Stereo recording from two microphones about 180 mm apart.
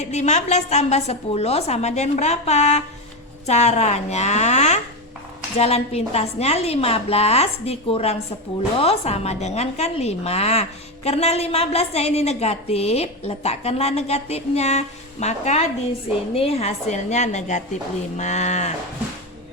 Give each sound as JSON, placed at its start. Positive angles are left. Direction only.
{"t": 0.0, "sound": "a woman's voice", "side_deg": 40}